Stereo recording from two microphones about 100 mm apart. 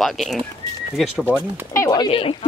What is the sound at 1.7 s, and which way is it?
Speech, 30° left (ahead or behind).